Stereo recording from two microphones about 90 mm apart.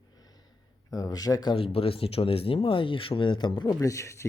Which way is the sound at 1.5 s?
90° left.